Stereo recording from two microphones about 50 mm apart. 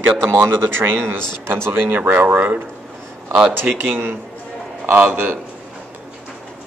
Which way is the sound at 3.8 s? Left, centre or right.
Right.